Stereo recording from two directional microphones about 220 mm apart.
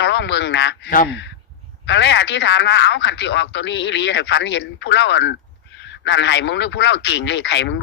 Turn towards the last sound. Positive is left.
turn(degrees=50)  # may be behind; listen again after turning